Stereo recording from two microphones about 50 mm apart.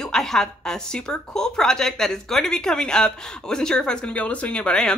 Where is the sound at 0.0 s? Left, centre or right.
Centre.